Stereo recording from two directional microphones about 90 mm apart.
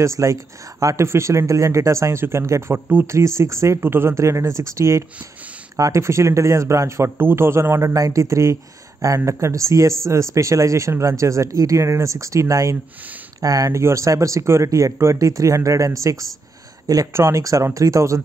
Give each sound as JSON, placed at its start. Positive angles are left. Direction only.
{"t": 0.0, "sound": "speech", "side_deg": -35}